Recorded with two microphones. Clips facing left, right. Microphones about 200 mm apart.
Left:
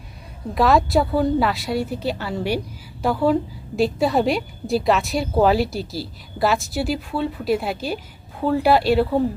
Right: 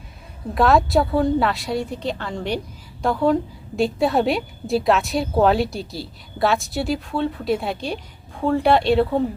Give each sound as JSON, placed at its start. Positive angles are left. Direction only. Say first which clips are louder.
{"t": 0.5, "sound": "a woman's voice", "louder": "even", "side_deg": 0}